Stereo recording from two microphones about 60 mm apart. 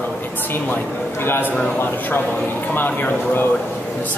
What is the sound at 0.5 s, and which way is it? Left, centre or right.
Speech, left.